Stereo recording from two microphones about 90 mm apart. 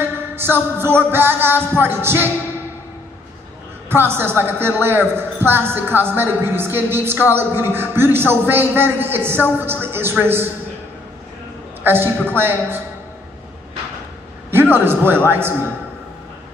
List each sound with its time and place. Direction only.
0.0 s a man's voice: 25° right (ahead or behind)
3.9 s a man's voice: 25° right (ahead or behind)
11.8 s a man's voice: 25° right (ahead or behind)
14.5 s a man's voice: 25° right (ahead or behind)